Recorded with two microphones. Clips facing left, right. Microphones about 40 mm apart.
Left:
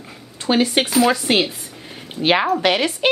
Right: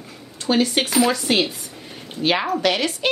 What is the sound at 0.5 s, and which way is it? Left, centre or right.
Speech, left.